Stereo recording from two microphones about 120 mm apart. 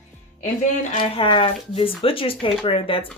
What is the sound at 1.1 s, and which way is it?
Speech, 45° left (ahead or behind).